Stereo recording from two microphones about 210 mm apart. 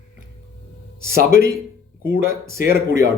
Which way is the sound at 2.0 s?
10° right (ahead or behind).